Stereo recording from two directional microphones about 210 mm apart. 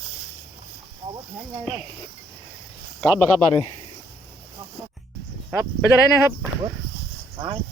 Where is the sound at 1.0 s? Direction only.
25° right (ahead or behind).